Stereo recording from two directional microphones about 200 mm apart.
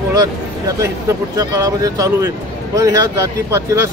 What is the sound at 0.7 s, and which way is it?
Speech, 15° right (ahead or behind).